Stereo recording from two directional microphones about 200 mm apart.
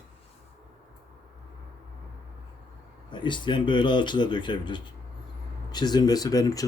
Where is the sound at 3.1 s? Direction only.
25° left (ahead or behind).